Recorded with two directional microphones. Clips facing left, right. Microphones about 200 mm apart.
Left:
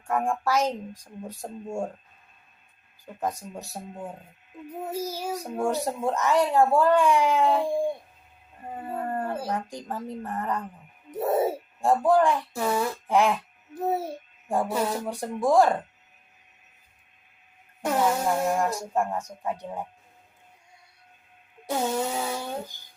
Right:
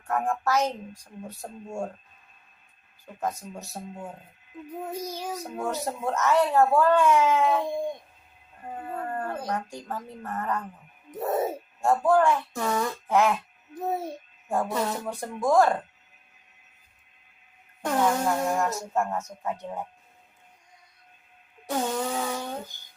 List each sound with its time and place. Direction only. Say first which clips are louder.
0.1 s a child's voice: left 1 dB; 10° left (ahead or behind)
3.2 s a child's voice: left 1 dB; 15° left (ahead or behind)
14.4 s a child's voice: left 1 dB; 15° left (ahead or behind)
17.8 s a child's voice: even; 10° left (ahead or behind)
21.7 s a child's voice: left 1 dB; 10° left (ahead or behind)